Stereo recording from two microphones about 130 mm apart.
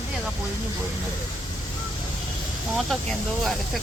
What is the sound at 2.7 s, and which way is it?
Speech, centre (ahead or behind).